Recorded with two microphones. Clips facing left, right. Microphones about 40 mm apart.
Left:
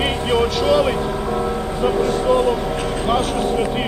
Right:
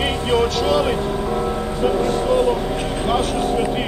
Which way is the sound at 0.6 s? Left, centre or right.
Centre.